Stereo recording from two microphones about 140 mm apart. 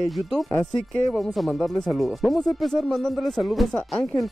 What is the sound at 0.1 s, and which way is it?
Speech, centre (ahead or behind).